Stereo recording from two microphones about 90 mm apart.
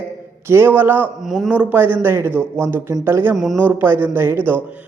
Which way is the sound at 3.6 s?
20° right (ahead or behind).